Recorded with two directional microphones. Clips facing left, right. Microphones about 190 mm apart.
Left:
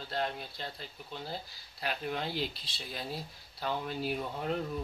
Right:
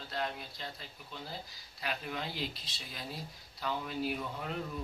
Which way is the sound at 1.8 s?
35° left (ahead or behind).